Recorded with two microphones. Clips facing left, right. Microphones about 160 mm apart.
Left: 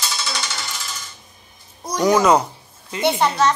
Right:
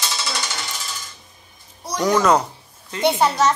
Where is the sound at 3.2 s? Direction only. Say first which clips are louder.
Even; 10° right (ahead or behind).